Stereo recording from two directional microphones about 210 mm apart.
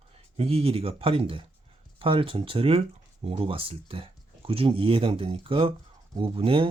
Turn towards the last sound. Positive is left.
turn(degrees=-25)  # may be behind; listen again after turning